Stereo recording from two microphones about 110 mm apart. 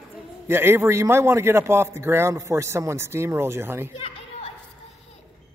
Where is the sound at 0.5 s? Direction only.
20° right (ahead or behind).